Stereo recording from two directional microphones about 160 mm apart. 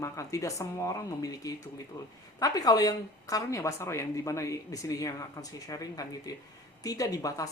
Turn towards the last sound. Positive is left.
turn(degrees=20)  # may be behind; listen again after turning